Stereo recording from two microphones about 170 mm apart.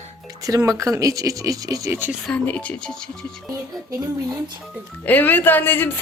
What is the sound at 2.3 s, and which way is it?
Speech, 10° left (ahead or behind).